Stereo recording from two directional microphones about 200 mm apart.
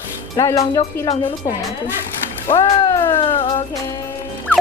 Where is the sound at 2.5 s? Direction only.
15° left (ahead or behind).